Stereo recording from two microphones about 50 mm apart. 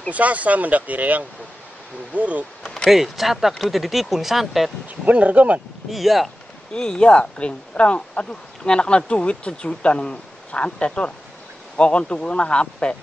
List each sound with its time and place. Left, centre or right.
0.1 s speech: right
2.9 s speech: centre
5.0 s speech: right
5.9 s speech: centre
6.7 s speech: centre